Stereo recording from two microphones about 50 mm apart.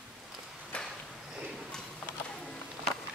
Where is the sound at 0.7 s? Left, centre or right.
Left.